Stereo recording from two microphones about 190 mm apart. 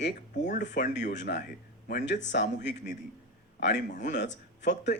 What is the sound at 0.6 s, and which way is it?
Speech, 65° left (ahead or behind).